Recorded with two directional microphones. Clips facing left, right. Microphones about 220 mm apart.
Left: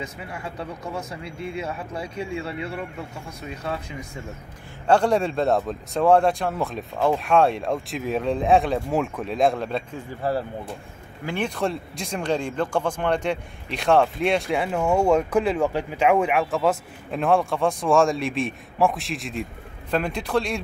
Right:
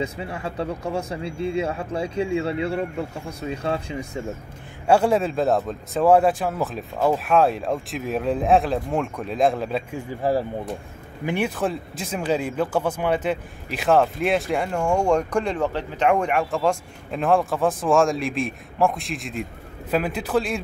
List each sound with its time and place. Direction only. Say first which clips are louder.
0.0 s speech: right 6 dB; 30° right (ahead or behind)
4.8 s speech: right 1 dB; 5° right (ahead or behind)
10.2 s speech: right 3 dB; 15° right (ahead or behind)